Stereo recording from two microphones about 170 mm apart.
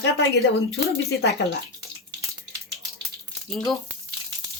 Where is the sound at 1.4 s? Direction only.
90° left.